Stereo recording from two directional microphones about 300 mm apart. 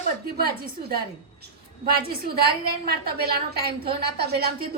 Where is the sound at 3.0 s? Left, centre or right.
Right.